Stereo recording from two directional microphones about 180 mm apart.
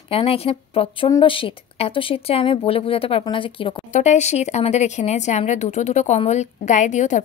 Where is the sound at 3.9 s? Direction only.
40° left (ahead or behind).